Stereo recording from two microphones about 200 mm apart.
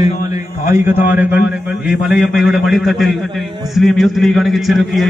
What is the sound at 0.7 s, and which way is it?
A man's voice, 10° right (ahead or behind).